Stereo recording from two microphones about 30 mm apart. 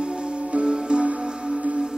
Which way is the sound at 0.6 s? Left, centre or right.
Right.